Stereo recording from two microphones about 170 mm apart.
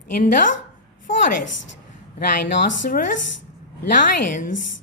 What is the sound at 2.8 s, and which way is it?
Speech, 50° left (ahead or behind).